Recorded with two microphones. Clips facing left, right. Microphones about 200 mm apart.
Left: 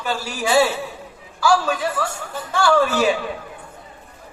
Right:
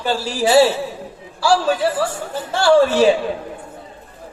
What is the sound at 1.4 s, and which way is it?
A man's voice, 30° right (ahead or behind).